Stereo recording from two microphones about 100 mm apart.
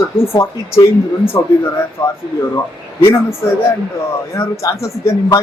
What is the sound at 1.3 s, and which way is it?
Speech, 35° left (ahead or behind).